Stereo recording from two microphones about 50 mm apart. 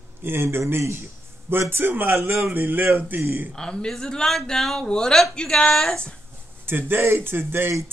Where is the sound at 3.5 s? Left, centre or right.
Centre.